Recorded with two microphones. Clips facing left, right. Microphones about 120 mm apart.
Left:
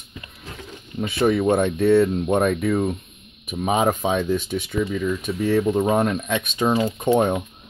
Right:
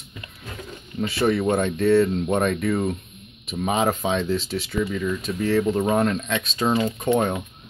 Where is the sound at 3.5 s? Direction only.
10° left (ahead or behind).